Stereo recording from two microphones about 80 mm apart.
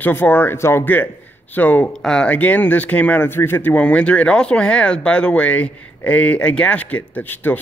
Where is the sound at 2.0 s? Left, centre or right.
Centre.